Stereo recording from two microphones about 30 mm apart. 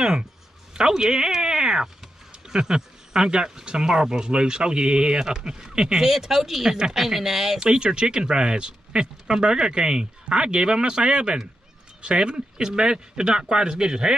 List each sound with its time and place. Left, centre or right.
0.0 s speech: right; by 7.5 s centre
7.5 s speech: right